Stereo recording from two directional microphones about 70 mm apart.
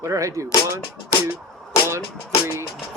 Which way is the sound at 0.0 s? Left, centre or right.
Right.